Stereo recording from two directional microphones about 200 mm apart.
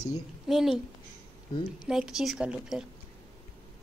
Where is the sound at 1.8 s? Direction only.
5° right (ahead or behind).